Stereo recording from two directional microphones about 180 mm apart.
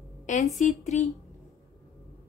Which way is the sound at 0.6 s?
40° left (ahead or behind).